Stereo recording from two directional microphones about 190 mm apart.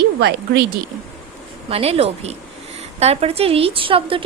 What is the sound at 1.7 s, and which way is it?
A woman's voice, 30° right (ahead or behind).